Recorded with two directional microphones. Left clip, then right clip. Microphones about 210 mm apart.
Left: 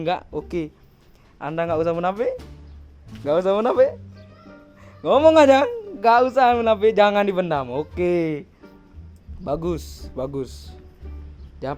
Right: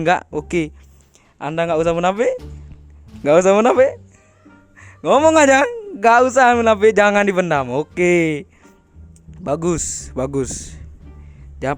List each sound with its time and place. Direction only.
0.0 s a man's voice: 35° right (ahead or behind)